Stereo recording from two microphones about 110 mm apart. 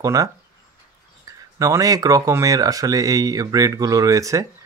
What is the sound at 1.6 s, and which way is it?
Speech, 30° right (ahead or behind).